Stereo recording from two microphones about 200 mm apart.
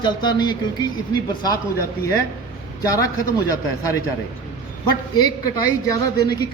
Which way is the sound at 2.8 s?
15° left (ahead or behind).